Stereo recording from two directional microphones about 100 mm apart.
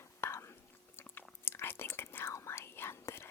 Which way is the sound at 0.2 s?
25° left (ahead or behind).